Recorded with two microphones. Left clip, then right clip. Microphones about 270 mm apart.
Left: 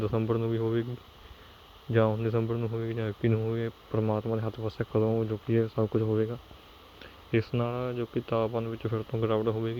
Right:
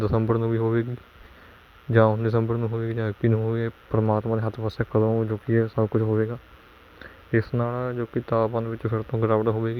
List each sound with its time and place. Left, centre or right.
0.0 s speech: right
1.9 s speech: right